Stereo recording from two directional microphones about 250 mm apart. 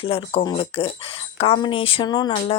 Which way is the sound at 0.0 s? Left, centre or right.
Left.